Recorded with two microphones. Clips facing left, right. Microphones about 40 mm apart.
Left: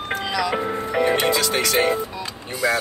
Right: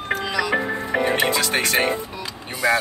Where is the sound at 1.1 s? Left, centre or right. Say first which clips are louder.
Left 1 dB; right.